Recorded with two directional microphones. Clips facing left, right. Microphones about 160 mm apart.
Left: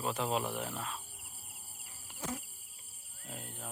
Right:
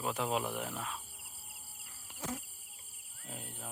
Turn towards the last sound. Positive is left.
turn(degrees=-15)  # may be behind; listen again after turning